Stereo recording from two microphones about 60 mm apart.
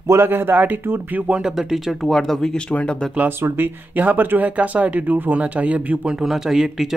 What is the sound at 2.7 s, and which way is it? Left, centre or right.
Speech, centre.